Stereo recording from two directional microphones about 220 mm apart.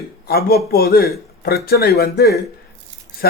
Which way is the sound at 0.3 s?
45° left (ahead or behind).